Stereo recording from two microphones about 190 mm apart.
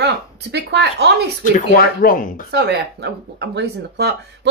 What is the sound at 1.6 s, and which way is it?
Speech, 45° left (ahead or behind).